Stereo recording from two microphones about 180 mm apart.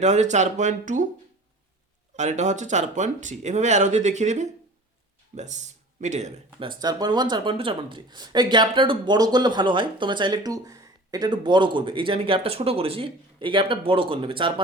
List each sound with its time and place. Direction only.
0.0 s speech: 40° right (ahead or behind)
2.1 s speech: 40° right (ahead or behind)
6.7 s speech: 25° right (ahead or behind)